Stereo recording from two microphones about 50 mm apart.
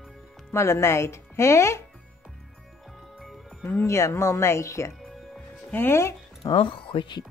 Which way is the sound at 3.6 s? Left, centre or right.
Left.